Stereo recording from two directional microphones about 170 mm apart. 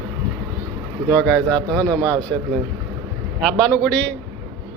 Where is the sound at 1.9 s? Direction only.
20° right (ahead or behind).